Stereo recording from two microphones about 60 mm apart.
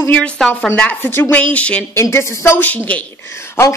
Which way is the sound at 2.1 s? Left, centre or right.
Left.